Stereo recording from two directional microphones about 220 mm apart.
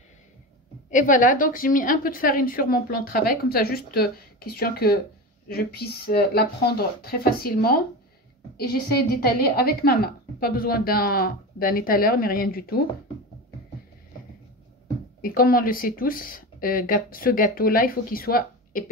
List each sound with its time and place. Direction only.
0.8 s a woman's voice: 35° left (ahead or behind)
15.2 s a woman's voice: 40° left (ahead or behind)